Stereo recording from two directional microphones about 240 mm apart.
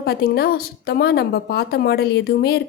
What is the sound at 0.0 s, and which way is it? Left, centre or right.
A woman's voice, left.